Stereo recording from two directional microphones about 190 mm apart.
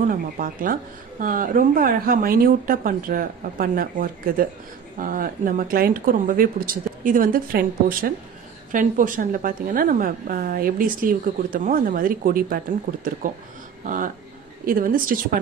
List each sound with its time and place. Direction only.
0.1 s a woman's voice: 45° right (ahead or behind)